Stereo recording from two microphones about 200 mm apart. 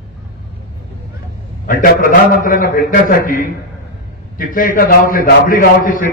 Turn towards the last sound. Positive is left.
turn(degrees=45)  # may be behind; listen again after turning